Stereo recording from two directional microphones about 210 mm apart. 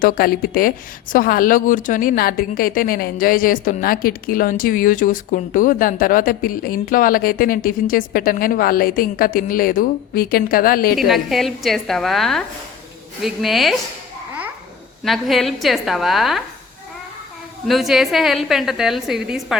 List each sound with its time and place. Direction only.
0.0 s a woman's voice: 45° left (ahead or behind)
10.9 s a woman's voice: centre (ahead or behind)
15.0 s a woman's voice: centre (ahead or behind)
17.7 s a woman's voice: centre (ahead or behind)